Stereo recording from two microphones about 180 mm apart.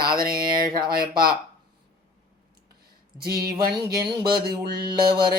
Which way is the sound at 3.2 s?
55° right (ahead or behind).